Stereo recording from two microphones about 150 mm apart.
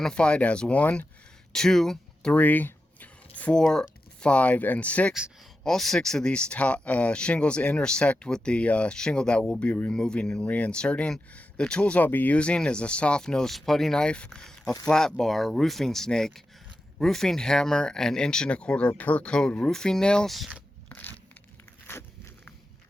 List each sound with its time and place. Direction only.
0.0 s speech: 5° left (ahead or behind)
20.9 s a sound: 15° left (ahead or behind)
21.8 s biting: 15° left (ahead or behind)